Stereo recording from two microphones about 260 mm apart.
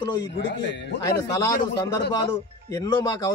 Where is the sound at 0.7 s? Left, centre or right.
Left.